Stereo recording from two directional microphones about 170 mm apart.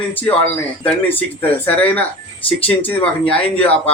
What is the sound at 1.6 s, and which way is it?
Speech, 10° left (ahead or behind).